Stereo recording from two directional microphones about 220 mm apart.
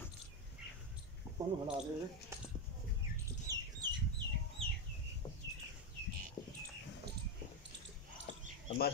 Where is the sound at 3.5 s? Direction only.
15° right (ahead or behind).